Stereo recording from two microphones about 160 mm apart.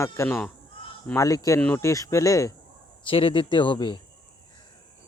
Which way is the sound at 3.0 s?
35° left (ahead or behind).